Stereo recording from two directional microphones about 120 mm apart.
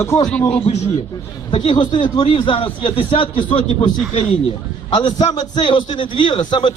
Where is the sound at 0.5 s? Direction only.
55° left (ahead or behind).